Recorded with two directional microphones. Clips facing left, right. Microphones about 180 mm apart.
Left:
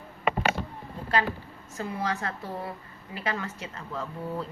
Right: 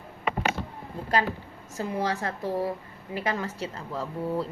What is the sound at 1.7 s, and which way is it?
Speech, 35° right (ahead or behind).